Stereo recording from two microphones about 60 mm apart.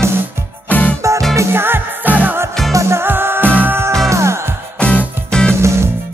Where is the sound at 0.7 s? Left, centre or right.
Left.